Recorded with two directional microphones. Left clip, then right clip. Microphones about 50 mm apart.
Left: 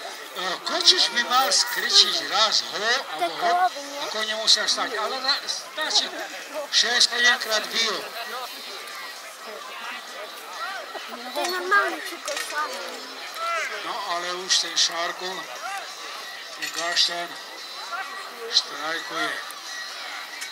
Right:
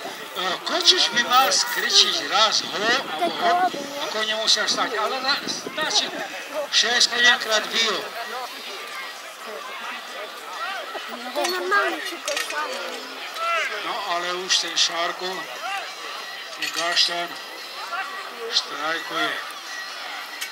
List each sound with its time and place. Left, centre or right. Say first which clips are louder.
0.4 s speech: right 2 dB; left
11.5 s a sound: left 1 dB; centre
12.0 s speech: right 3 dB; centre
12.5 s speech: right 1 dB; centre
16.8 s speech: right 2 dB; left
18.5 s speech: even; left